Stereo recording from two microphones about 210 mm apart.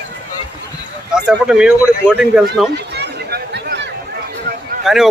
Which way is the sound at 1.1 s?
5° right (ahead or behind).